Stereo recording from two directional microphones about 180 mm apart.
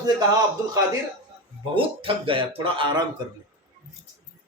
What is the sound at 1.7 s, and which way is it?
A man's voice, 30° right (ahead or behind).